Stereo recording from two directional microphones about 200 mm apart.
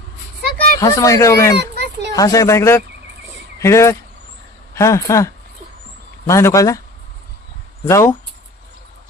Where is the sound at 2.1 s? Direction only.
15° left (ahead or behind).